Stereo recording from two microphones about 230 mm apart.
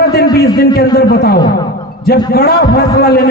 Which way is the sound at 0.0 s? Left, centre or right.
Left.